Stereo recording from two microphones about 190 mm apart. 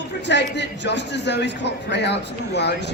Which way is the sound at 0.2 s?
65° left (ahead or behind).